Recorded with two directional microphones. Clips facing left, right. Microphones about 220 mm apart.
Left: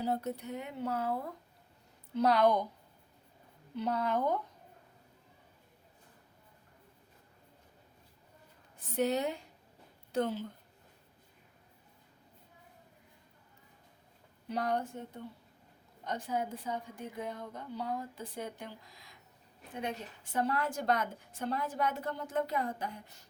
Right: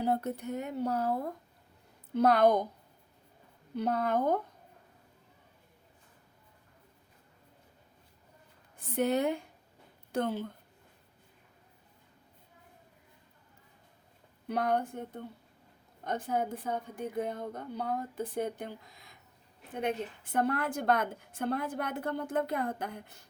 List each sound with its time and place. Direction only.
0.0 s a woman's voice: 55° right (ahead or behind); by 1.2 s 40° right (ahead or behind)
2.1 s a woman's voice: 50° right (ahead or behind)
3.8 s a woman's voice: 50° right (ahead or behind)
9.0 s a woman's voice: 55° right (ahead or behind)
14.4 s a woman's voice: 55° right (ahead or behind)
19.7 s a woman's voice: 55° right (ahead or behind)